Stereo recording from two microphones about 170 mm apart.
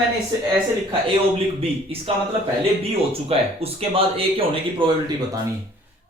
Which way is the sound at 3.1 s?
35° right (ahead or behind).